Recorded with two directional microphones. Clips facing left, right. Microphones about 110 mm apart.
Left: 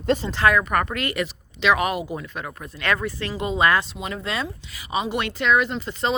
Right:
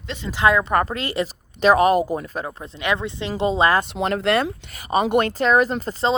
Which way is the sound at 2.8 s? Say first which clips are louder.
Right 1 dB; 20° right (ahead or behind).